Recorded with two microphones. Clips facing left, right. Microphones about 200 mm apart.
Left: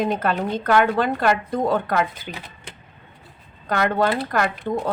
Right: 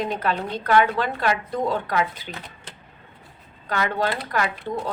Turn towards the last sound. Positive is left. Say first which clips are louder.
# left 3 dB
turn(degrees=50)  # may be behind; listen again after turning